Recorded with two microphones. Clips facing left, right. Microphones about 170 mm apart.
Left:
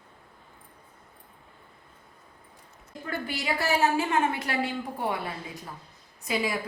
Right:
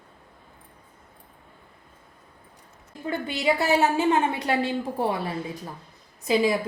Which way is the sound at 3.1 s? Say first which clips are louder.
Right 6 dB; 20° right (ahead or behind).